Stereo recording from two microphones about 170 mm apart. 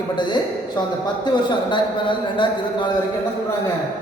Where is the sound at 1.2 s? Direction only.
25° left (ahead or behind).